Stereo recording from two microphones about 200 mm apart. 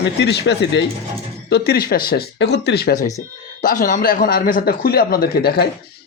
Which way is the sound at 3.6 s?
45° left (ahead or behind).